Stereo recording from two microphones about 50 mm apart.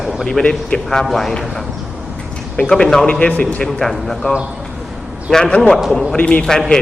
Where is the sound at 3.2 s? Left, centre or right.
Left.